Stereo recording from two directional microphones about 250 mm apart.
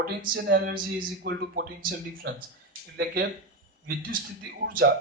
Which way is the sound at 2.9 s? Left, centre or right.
Right.